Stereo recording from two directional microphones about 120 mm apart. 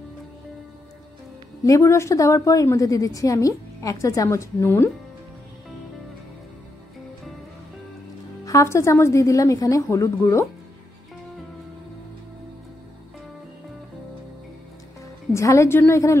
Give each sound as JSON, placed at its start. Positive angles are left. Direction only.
{"t": 1.6, "sound": "a woman's voice", "side_deg": 25}
{"t": 8.5, "sound": "a woman's voice", "side_deg": 25}
{"t": 15.3, "sound": "a woman's voice", "side_deg": 25}